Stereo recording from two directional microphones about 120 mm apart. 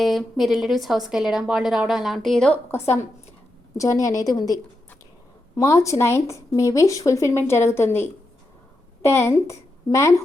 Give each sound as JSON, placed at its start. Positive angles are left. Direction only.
{"t": 0.0, "sound": "a woman's voice", "side_deg": 0}
{"t": 3.8, "sound": "a woman's voice", "side_deg": 25}